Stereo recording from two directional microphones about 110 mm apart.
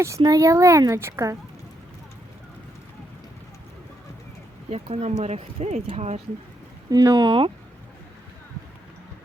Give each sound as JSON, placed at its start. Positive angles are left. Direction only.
{"t": 0.2, "sound": "a woman's voice", "side_deg": -35}
{"t": 4.7, "sound": "speech", "side_deg": -70}
{"t": 6.9, "sound": "speech", "side_deg": -35}
{"t": 7.3, "sound": "speech", "side_deg": -50}